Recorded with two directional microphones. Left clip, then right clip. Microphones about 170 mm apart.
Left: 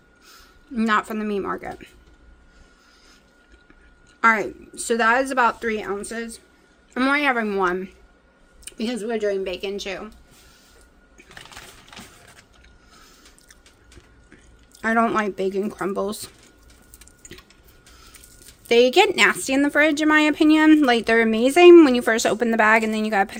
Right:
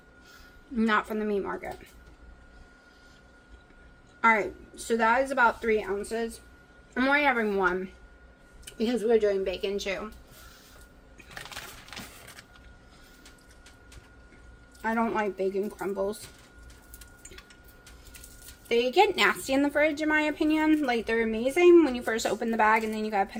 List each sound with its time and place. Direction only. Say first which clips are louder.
0.8 s speech: left 5 dB; 45° left (ahead or behind)
4.2 s a woman's voice: left 5 dB; 55° left (ahead or behind)
8.6 s speech: right 1 dB; 80° left; by 10.0 s 50° left (ahead or behind)
14.8 s speech: left 8 dB; 75° left (ahead or behind)
18.7 s a woman's voice: left 7 dB; 75° left (ahead or behind); by 19.8 s 45° left (ahead or behind)
19.8 s speech: left 8 dB; 70° left (ahead or behind)